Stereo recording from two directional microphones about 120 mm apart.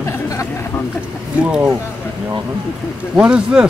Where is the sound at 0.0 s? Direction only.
25° left (ahead or behind).